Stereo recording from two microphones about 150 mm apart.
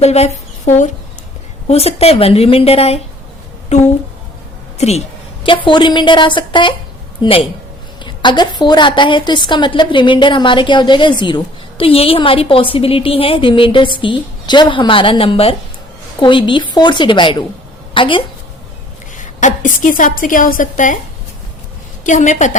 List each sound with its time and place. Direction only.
0.0 s a woman's voice: 45° left (ahead or behind)
19.1 s a woman's voice: 55° left (ahead or behind)
22.0 s a woman's voice: 55° left (ahead or behind)